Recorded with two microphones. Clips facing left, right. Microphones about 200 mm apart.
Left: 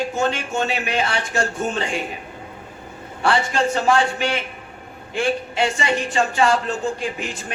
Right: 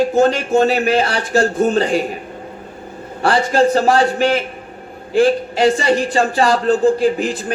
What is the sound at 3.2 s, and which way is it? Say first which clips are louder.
A man's voice: right 6 dB; 35° right (ahead or behind).